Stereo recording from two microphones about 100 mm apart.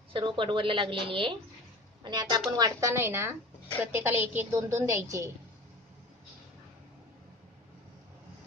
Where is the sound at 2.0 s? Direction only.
45° right (ahead or behind); by 4.4 s 20° right (ahead or behind).